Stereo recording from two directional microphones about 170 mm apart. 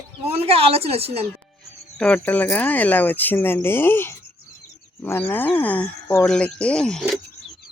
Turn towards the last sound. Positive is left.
turn(degrees=5)  # may be behind; listen again after turning